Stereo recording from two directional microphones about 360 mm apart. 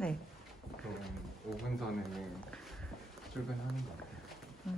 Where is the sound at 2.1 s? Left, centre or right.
Centre.